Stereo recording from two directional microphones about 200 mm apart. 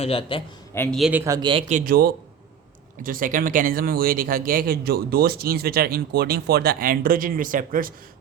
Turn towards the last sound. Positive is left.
turn(degrees=-45)  # may be behind; listen again after turning